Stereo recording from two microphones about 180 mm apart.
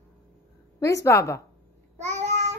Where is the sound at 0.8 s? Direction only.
15° left (ahead or behind).